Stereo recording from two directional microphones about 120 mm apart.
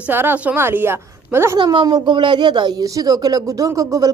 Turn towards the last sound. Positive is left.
turn(degrees=-30)  # may be behind; listen again after turning